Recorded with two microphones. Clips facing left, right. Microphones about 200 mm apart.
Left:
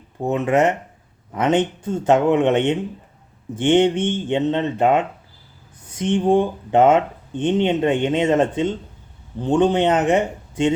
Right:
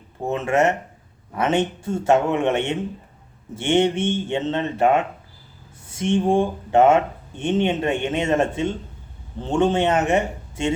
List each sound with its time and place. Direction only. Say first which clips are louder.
0.3 s speech: left 2 dB; 15° left (ahead or behind)